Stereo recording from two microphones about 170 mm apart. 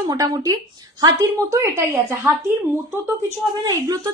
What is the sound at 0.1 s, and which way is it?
A woman's voice, 25° right (ahead or behind).